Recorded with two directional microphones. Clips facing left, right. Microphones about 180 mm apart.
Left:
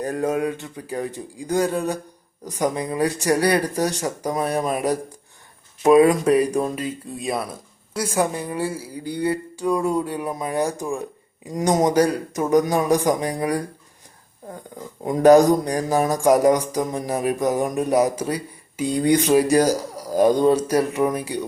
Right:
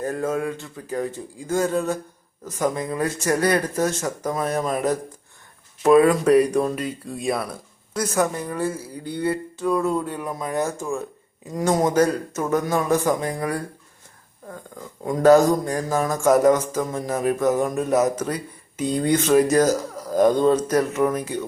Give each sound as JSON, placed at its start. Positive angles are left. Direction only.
{"t": 0.0, "sound": "speech", "side_deg": 15}
{"t": 15.0, "sound": "speech", "side_deg": 20}